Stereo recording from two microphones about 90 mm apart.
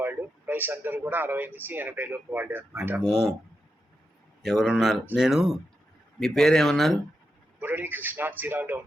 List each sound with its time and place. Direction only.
0.0 s speech: 20° right (ahead or behind)
3.0 s speech: 5° right (ahead or behind)
4.6 s speech: 10° right (ahead or behind)
7.6 s speech: 20° right (ahead or behind)